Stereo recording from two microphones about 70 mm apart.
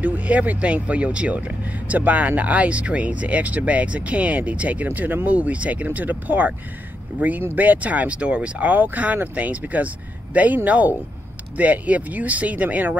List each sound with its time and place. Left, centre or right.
0.0 s speech: right